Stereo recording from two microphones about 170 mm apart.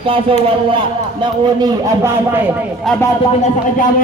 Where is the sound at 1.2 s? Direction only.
20° right (ahead or behind).